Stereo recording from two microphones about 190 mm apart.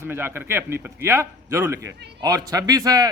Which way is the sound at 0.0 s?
10° right (ahead or behind).